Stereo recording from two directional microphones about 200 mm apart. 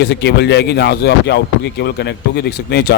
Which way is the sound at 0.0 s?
55° left (ahead or behind).